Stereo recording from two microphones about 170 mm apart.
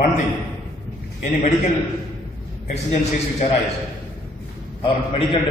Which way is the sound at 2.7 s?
40° left (ahead or behind).